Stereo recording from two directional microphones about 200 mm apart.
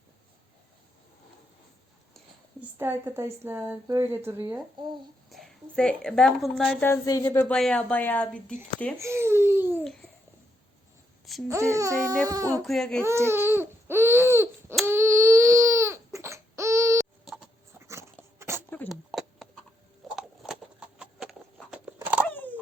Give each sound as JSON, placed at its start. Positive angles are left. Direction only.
{"t": 2.7, "sound": "a woman's voice", "side_deg": -10}
{"t": 5.7, "sound": "speech", "side_deg": 5}
{"t": 6.8, "sound": "a woman's voice", "side_deg": 15}
{"t": 9.0, "sound": "a woman's voice", "side_deg": -15}
{"t": 9.8, "sound": "babbling", "side_deg": 0}
{"t": 11.4, "sound": "a woman's voice", "side_deg": -15}
{"t": 12.6, "sound": "speech", "side_deg": 0}
{"t": 13.0, "sound": "babbling", "side_deg": -15}
{"t": 14.8, "sound": "baby cry", "side_deg": -15}
{"t": 17.2, "sound": "a sound", "side_deg": 0}
{"t": 17.8, "sound": "a sound", "side_deg": -15}
{"t": 18.9, "sound": "a sound", "side_deg": 0}
{"t": 22.3, "sound": "a sound", "side_deg": 10}